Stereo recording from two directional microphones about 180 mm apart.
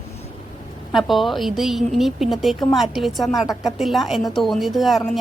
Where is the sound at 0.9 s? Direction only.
Centre (ahead or behind).